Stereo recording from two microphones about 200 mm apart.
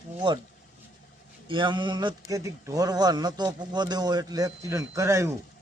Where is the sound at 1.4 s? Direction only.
25° right (ahead or behind).